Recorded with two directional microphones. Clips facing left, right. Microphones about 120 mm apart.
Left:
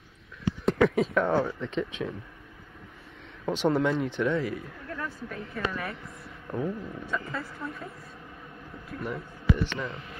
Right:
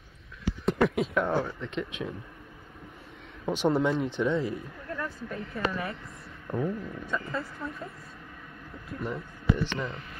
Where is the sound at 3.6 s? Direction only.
15° right (ahead or behind).